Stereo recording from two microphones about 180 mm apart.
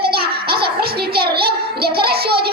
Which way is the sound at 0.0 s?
60° right (ahead or behind).